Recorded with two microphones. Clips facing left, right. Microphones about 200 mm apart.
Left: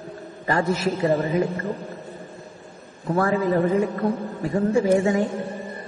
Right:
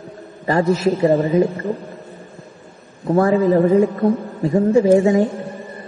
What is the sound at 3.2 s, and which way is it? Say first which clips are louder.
A man's voice: right 6 dB; 20° right (ahead or behind).